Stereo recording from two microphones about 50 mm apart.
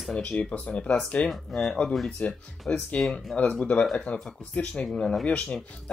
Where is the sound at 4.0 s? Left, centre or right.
Left.